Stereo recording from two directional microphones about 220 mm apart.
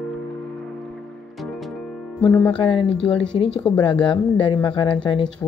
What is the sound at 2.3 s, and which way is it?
Speech, 5° left (ahead or behind).